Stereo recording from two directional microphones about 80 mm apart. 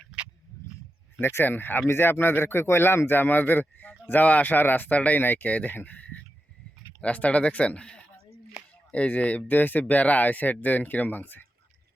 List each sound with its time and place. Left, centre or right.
1.2 s speech: left; by 8.0 s centre
8.6 s a sound: centre
8.9 s speech: centre